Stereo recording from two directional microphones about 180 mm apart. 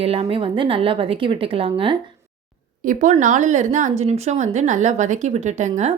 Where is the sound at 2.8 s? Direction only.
45° right (ahead or behind).